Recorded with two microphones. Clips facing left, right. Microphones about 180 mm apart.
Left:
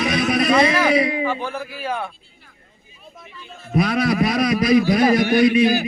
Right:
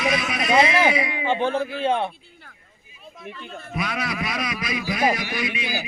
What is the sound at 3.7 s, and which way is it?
A man's voice, 35° left (ahead or behind).